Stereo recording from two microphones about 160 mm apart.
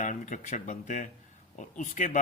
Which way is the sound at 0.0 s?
50° left (ahead or behind).